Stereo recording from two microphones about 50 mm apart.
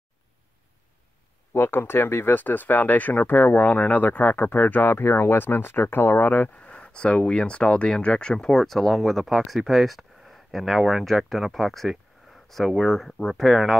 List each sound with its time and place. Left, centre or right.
1.5 s speech: left
6.7 s a sound: centre
7.2 s speech: centre